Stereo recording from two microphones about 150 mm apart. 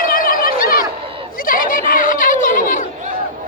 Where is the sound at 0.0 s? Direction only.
70° left (ahead or behind).